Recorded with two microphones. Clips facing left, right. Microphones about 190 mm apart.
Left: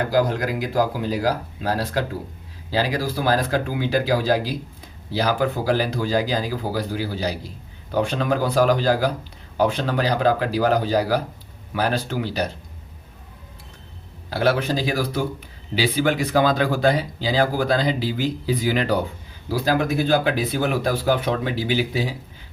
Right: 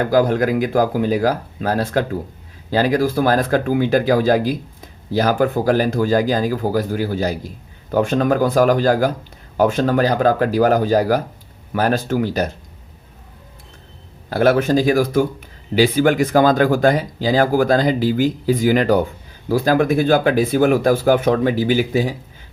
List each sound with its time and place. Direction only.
0.1 s speech: 50° right (ahead or behind)
14.3 s speech: 50° right (ahead or behind)